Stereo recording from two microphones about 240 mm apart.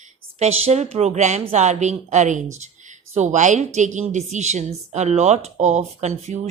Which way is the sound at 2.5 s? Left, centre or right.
Right.